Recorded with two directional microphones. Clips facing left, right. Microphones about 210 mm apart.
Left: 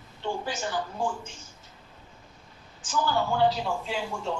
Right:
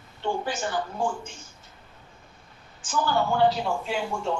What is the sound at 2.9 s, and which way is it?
Speech, 55° right (ahead or behind).